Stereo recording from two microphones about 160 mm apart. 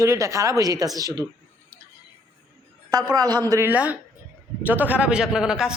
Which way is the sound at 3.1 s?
25° right (ahead or behind).